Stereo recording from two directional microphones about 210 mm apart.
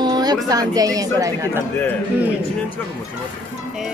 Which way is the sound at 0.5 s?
15° right (ahead or behind).